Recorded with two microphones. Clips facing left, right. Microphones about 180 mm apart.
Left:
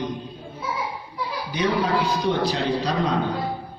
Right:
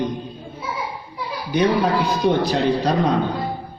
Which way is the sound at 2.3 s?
55° right (ahead or behind).